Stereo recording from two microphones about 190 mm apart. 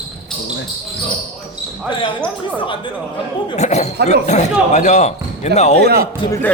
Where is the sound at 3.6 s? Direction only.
35° left (ahead or behind).